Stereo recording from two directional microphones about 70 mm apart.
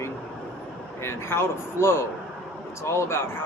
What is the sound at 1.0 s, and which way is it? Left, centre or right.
A man's voice, left.